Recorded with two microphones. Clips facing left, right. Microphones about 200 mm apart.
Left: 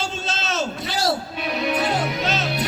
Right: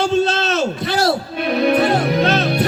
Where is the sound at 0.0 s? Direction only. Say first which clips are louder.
Right 12 dB; 60° right (ahead or behind).